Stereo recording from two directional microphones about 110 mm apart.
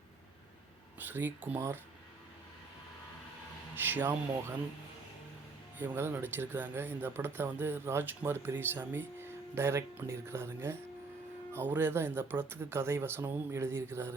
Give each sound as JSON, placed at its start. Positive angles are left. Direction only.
{"t": 0.9, "sound": "speech", "side_deg": -20}
{"t": 3.8, "sound": "speech", "side_deg": -20}
{"t": 5.8, "sound": "speech", "side_deg": -20}